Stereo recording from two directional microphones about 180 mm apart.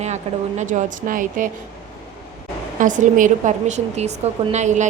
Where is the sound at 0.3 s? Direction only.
35° right (ahead or behind).